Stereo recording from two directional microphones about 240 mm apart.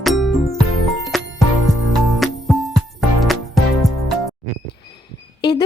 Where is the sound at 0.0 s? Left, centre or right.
Centre.